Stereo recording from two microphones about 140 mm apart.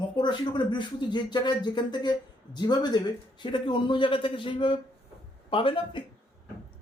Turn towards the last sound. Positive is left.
turn(degrees=40)  # may be behind; listen again after turning